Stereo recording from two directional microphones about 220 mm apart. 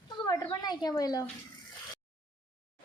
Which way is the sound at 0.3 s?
20° left (ahead or behind).